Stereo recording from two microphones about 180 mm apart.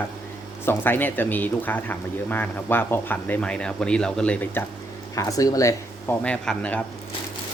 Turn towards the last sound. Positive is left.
turn(degrees=5)  # may be behind; listen again after turning